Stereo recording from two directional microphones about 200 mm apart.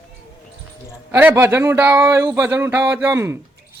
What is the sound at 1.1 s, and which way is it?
Speech, 10° right (ahead or behind).